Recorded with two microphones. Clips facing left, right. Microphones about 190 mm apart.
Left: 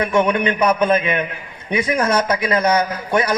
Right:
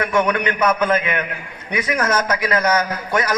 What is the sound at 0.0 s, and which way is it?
A man's voice, 20° left (ahead or behind).